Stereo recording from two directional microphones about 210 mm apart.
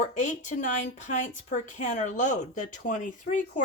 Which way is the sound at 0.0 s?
35° left (ahead or behind).